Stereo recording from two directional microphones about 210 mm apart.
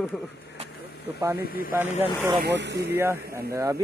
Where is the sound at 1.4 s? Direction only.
45° left (ahead or behind).